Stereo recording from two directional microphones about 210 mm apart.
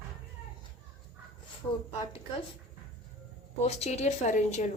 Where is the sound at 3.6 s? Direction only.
30° left (ahead or behind).